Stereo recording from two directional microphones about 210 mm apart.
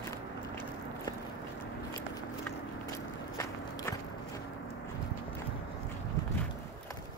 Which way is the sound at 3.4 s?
15° left (ahead or behind).